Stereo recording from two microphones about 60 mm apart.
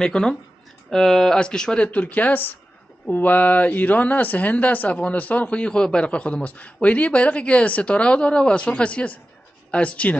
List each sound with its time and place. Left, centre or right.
0.0 s speech: centre
1.9 s speech: left